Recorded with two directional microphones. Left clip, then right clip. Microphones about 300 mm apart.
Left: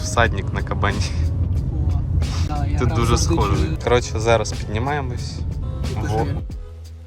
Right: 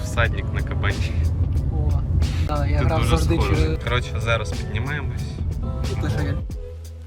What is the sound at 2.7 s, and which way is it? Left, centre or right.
Speech, centre.